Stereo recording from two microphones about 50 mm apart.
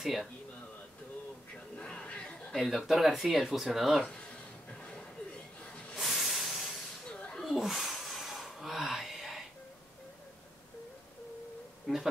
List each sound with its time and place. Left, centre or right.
0.0 s speech: centre
1.8 s music: left
2.5 s speech: centre
4.1 s a sound: left
5.9 s hiss: centre
7.2 s a sound: left
7.4 s gasp: centre